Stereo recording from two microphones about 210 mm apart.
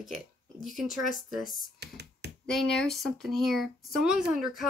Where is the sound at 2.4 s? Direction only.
Centre (ahead or behind).